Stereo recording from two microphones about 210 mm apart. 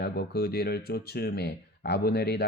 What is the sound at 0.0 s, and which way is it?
Speech, 50° left (ahead or behind).